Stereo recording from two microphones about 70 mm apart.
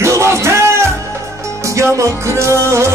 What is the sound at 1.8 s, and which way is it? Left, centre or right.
Music, right.